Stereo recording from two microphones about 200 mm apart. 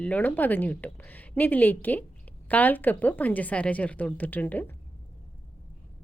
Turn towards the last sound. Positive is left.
turn(degrees=10)  # may be behind; listen again after turning